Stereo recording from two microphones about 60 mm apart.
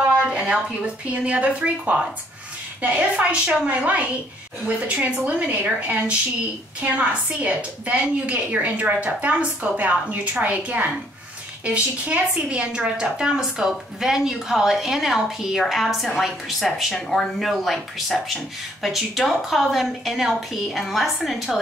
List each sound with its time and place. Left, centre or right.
0.1 s a woman's voice: centre